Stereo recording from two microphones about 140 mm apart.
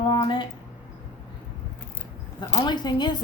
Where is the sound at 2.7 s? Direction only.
30° left (ahead or behind).